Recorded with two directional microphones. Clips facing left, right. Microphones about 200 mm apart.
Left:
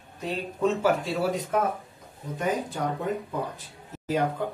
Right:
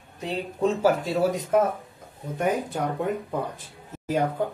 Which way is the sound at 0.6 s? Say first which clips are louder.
Right 2 dB; 40° right (ahead or behind).